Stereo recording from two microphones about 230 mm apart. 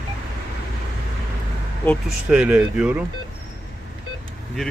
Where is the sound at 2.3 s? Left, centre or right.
Centre.